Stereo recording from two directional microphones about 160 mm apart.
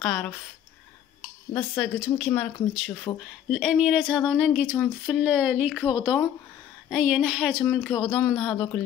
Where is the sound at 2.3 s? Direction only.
5° left (ahead or behind).